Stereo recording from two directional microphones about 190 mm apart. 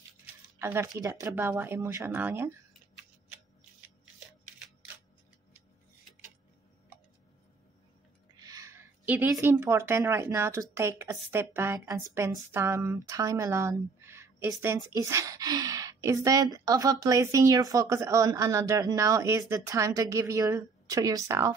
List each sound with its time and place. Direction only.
0.6 s a woman's voice: 15° right (ahead or behind)
8.4 s a woman's voice: 20° right (ahead or behind)